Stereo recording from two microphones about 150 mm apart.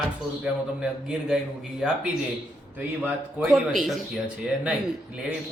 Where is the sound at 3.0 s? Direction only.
5° right (ahead or behind).